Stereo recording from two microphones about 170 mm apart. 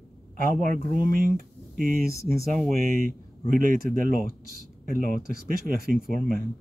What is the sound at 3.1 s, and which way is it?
A man's voice, 55° right (ahead or behind).